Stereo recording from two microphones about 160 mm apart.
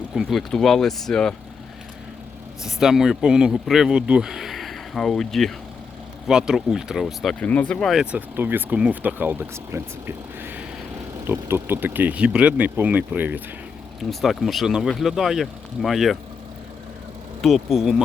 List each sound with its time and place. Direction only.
0.1 s speech: centre (ahead or behind)
2.6 s speech: centre (ahead or behind)
8.4 s speech: 10° right (ahead or behind)
14.0 s speech: centre (ahead or behind)
17.4 s speech: centre (ahead or behind)